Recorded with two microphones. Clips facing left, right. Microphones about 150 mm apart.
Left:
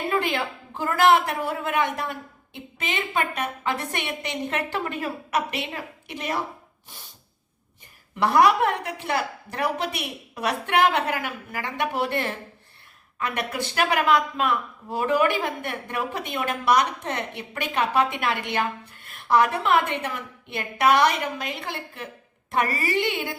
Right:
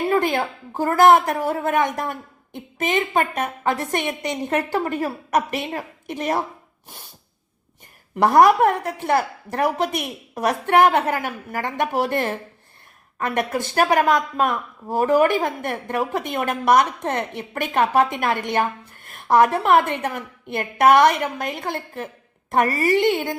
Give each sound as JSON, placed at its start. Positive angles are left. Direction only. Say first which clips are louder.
{"t": 0.1, "sound": "speech", "louder": "right 5 dB", "side_deg": -45}
{"t": 8.2, "sound": "speech", "louder": "right 5 dB", "side_deg": -45}